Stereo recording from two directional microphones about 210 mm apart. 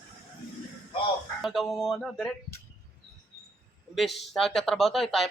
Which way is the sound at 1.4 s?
Centre (ahead or behind).